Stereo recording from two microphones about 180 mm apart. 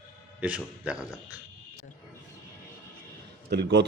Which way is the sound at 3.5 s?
70° right (ahead or behind).